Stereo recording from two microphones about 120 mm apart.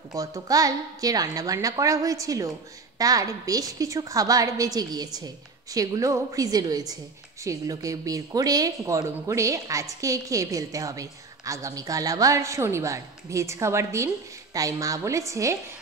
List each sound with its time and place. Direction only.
0.1 s a woman's voice: 30° right (ahead or behind)